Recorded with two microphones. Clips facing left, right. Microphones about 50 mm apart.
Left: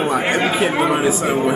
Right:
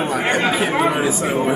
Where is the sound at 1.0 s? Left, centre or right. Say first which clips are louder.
Left 2 dB; centre.